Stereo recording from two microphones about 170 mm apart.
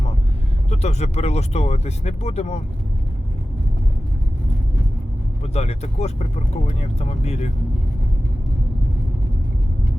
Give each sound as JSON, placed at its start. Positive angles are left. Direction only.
{"t": 0.7, "sound": "speech", "side_deg": 40}
{"t": 5.5, "sound": "speech", "side_deg": 40}